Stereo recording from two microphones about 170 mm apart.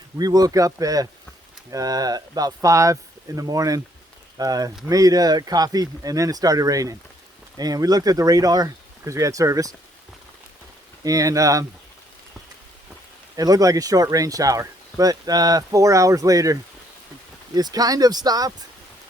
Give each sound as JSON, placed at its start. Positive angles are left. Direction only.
{"t": 0.2, "sound": "speech", "side_deg": -20}
{"t": 11.0, "sound": "speech", "side_deg": -20}
{"t": 13.3, "sound": "speech", "side_deg": -20}